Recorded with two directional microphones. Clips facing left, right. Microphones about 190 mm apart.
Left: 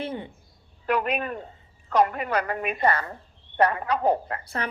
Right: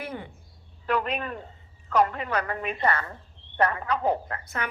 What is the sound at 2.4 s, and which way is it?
Speech, 10° left (ahead or behind).